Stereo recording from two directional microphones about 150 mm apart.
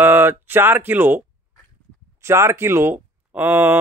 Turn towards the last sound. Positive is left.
turn(degrees=-15)  # may be behind; listen again after turning